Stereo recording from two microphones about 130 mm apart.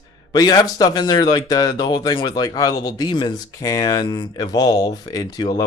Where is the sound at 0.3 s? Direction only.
30° left (ahead or behind).